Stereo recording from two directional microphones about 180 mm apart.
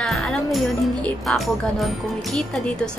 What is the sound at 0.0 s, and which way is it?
Speech, 5° left (ahead or behind).